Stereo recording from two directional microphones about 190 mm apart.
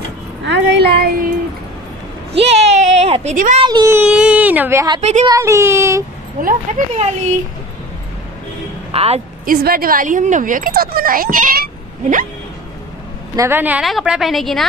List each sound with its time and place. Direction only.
0.5 s speech: 65° right (ahead or behind)
2.3 s a sound: 35° right (ahead or behind)
3.6 s speech: 20° right (ahead or behind)
4.0 s speech: 5° right (ahead or behind)
6.4 s speech: 40° right (ahead or behind)
8.9 s speech: 30° right (ahead or behind)
9.5 s speech: 50° right (ahead or behind)
13.4 s a woman's voice: 10° right (ahead or behind)